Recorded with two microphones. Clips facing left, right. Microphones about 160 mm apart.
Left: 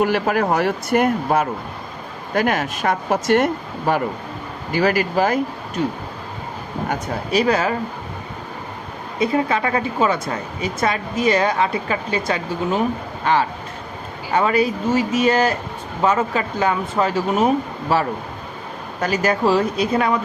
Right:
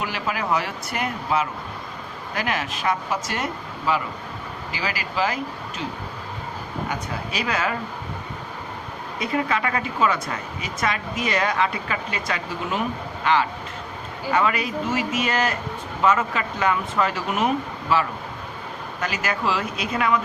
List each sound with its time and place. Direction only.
0.0 s speech: 55° left (ahead or behind)
6.8 s speech: 45° left (ahead or behind)
9.1 s speech: 25° left (ahead or behind)